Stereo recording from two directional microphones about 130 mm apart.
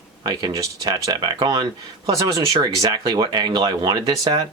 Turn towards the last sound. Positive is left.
turn(degrees=-30)  # may be behind; listen again after turning